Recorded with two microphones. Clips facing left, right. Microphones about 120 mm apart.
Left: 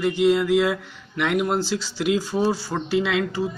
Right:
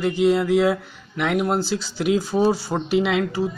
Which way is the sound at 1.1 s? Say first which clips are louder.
Right 1 dB; 5° right (ahead or behind).